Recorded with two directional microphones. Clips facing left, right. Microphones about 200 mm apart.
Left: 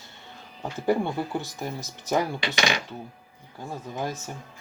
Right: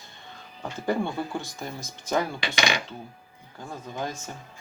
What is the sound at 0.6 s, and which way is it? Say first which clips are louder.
Speech: left 3 dB; 10° left (ahead or behind).